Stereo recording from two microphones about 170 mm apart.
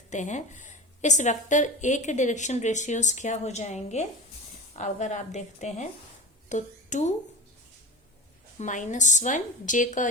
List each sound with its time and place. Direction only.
0.1 s a woman's voice: 45° left (ahead or behind)
8.5 s a woman's voice: 45° left (ahead or behind)